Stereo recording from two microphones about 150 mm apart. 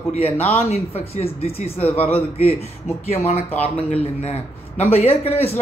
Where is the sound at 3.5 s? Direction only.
10° left (ahead or behind).